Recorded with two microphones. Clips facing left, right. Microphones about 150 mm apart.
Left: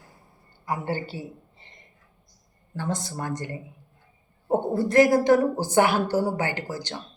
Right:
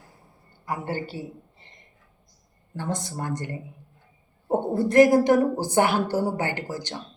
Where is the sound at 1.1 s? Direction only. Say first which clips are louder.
Right 1 dB; 45° right (ahead or behind).